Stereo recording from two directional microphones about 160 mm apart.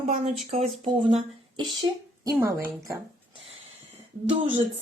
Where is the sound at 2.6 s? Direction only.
65° right (ahead or behind).